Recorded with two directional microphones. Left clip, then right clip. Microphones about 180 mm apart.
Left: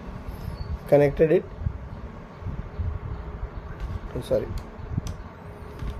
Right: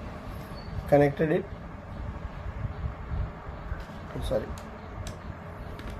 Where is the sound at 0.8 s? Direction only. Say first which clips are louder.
Left 4 dB; 40° left (ahead or behind).